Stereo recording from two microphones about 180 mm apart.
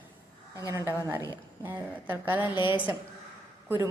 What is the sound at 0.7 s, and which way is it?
A woman's voice, 20° right (ahead or behind).